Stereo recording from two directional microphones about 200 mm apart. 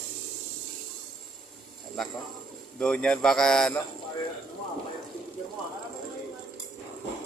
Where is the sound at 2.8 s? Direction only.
5° left (ahead or behind).